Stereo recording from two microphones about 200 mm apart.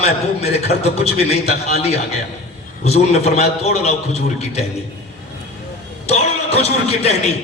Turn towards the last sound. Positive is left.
turn(degrees=30)  # may be behind; listen again after turning